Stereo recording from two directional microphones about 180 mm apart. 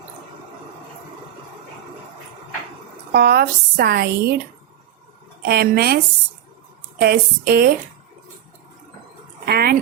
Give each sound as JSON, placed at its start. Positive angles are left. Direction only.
{"t": 3.1, "sound": "speech", "side_deg": -60}
{"t": 5.4, "sound": "speech", "side_deg": -60}
{"t": 7.0, "sound": "speech", "side_deg": -60}
{"t": 9.5, "sound": "speech", "side_deg": -60}